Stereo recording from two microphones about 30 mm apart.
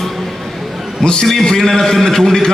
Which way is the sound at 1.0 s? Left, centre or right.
Left.